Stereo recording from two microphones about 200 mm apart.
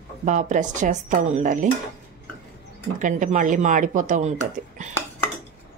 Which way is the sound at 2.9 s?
40° right (ahead or behind).